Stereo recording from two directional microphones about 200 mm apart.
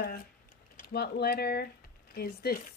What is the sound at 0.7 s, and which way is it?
Speech, 55° left (ahead or behind).